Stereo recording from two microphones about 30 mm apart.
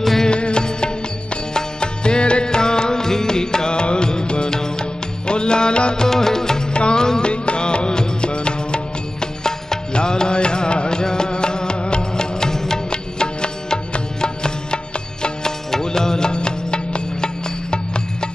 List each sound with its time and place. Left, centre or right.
0.3 s music: left
5.9 s music: centre
6.7 s music: left
12.9 s music: left